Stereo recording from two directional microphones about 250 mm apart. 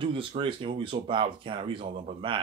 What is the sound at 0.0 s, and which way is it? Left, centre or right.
Speech, right.